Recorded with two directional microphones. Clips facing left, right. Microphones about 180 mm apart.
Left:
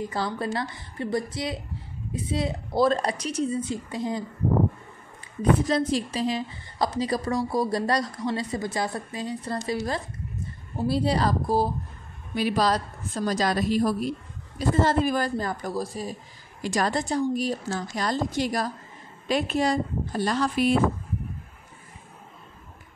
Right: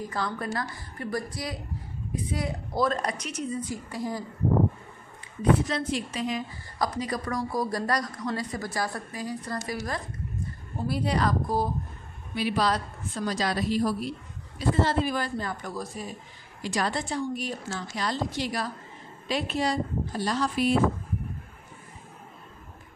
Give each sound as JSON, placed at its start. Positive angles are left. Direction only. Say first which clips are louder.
{"t": 0.0, "sound": "a woman's voice", "louder": "left 3 dB", "side_deg": 30}
{"t": 5.7, "sound": "a woman's voice", "louder": "left 5 dB", "side_deg": 35}
{"t": 12.4, "sound": "a woman's voice", "louder": "left 3 dB", "side_deg": 40}